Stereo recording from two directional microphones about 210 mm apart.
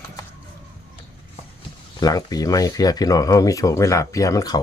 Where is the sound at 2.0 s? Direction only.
20° left (ahead or behind).